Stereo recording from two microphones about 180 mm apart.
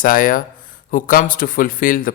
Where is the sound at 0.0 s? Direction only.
50° left (ahead or behind).